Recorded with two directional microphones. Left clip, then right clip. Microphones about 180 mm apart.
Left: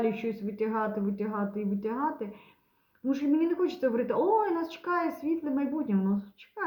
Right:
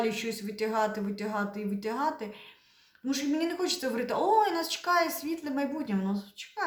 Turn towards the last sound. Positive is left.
turn(degrees=-10)  # may be behind; listen again after turning